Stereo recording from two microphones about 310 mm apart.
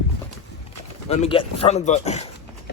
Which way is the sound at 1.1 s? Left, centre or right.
Centre.